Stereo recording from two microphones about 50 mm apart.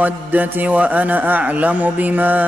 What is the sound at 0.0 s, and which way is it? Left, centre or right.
A man's voice, right.